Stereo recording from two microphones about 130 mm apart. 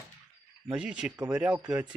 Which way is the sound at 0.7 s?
10° right (ahead or behind).